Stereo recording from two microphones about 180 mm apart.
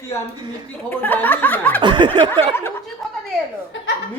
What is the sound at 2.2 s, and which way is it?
Snicker, 10° left (ahead or behind).